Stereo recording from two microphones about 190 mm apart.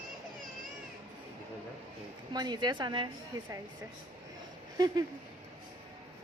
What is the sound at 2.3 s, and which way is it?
A woman's voice, 20° right (ahead or behind).